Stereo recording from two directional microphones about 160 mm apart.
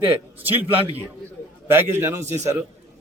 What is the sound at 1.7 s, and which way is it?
Speech, 15° right (ahead or behind).